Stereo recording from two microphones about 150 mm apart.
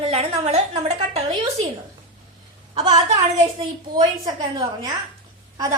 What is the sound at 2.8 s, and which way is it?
A woman's voice, 25° right (ahead or behind).